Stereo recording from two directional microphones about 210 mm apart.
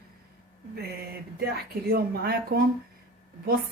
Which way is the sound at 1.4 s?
50° right (ahead or behind).